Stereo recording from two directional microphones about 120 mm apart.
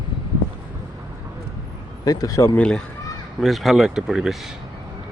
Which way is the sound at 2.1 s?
30° left (ahead or behind).